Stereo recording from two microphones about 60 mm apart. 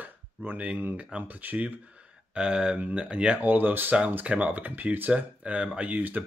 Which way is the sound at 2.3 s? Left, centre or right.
Centre.